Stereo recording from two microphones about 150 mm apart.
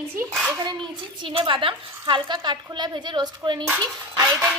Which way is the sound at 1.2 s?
35° right (ahead or behind).